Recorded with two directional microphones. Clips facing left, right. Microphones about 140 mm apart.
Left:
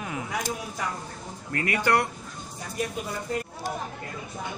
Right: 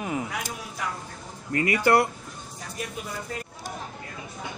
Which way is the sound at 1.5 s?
5° right (ahead or behind).